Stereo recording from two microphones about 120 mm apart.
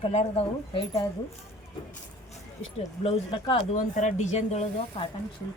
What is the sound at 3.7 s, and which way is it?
Speech, 90° left.